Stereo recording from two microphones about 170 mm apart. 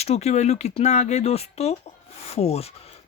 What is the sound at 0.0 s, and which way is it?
Speech, 40° left (ahead or behind).